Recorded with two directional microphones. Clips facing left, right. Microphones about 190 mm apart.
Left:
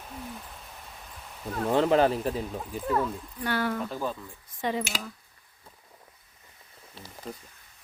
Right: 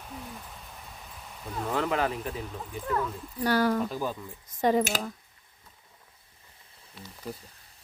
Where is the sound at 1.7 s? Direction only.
30° left (ahead or behind).